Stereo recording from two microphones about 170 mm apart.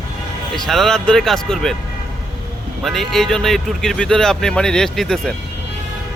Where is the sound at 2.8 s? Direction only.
Centre (ahead or behind).